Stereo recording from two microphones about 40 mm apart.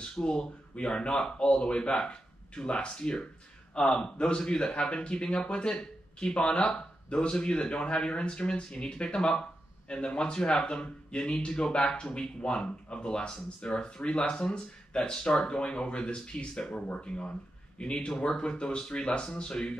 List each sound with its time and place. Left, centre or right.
0.0 s speech: left